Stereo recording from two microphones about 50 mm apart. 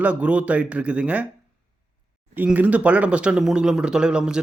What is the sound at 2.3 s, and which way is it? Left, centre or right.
Speech, right.